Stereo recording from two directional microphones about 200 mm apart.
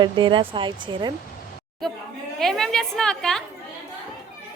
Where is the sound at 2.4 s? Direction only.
Centre (ahead or behind).